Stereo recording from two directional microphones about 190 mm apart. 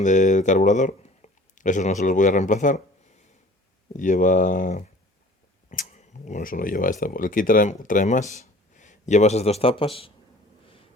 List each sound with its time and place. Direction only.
0.0 s speech: 40° left (ahead or behind)
3.9 s speech: 40° left (ahead or behind)